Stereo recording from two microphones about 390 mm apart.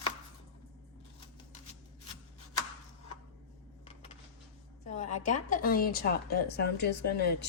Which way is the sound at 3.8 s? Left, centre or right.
Centre.